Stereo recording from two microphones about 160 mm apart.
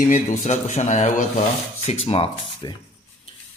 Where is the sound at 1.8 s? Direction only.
35° left (ahead or behind).